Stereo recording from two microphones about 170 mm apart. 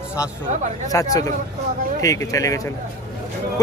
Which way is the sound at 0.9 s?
20° left (ahead or behind).